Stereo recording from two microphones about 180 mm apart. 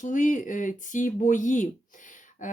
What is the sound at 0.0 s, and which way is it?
Speech, 45° left (ahead or behind).